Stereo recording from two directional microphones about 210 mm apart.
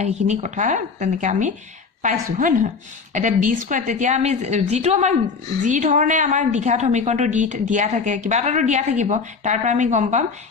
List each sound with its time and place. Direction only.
0.0 s a woman's voice: 30° right (ahead or behind)